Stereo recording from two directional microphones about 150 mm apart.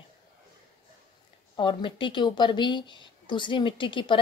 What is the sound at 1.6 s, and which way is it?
A woman's voice, 35° left (ahead or behind).